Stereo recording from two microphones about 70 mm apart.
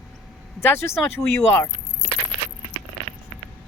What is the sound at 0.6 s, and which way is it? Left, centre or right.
Speech, left.